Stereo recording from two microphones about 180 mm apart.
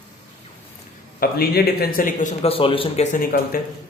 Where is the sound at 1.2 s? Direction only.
55° left (ahead or behind).